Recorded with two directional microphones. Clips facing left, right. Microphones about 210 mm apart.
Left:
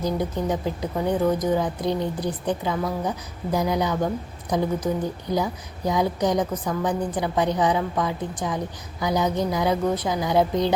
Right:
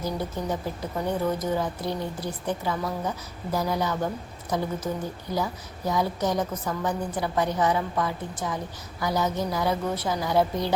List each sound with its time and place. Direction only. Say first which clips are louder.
0.0 s a woman's voice: left 5 dB; 15° left (ahead or behind)